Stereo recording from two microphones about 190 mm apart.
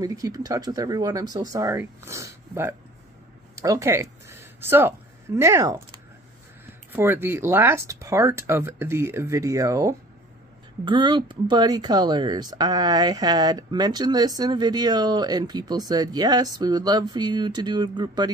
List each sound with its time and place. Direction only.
0.0 s speech: 20° right (ahead or behind)